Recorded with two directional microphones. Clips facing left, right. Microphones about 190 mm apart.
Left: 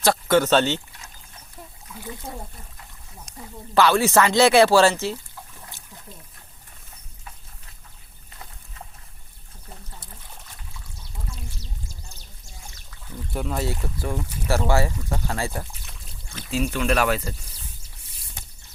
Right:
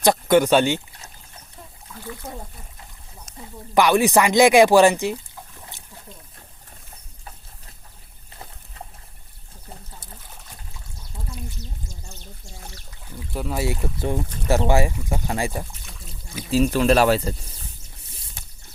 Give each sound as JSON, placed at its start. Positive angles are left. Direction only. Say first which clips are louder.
{"t": 0.0, "sound": "speech", "louder": "right 3 dB", "side_deg": -15}
{"t": 3.8, "sound": "speech", "louder": "right 1 dB", "side_deg": -15}
{"t": 5.7, "sound": "boat", "louder": "right 1 dB", "side_deg": -20}
{"t": 13.1, "sound": "boat", "louder": "right 1 dB", "side_deg": 0}
{"t": 13.7, "sound": "speech", "louder": "right 4 dB", "side_deg": -25}
{"t": 16.5, "sound": "speech", "louder": "right 6 dB", "side_deg": -35}